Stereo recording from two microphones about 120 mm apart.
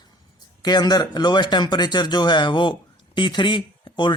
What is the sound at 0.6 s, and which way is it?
Speech, 35° left (ahead or behind).